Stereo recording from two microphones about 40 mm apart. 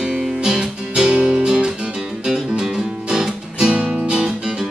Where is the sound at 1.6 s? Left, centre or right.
Centre.